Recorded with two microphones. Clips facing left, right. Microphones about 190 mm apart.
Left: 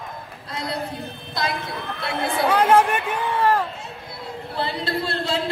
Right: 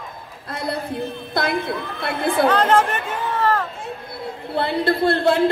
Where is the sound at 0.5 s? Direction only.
55° right (ahead or behind).